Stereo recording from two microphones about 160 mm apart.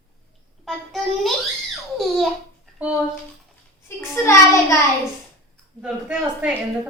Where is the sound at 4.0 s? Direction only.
20° left (ahead or behind).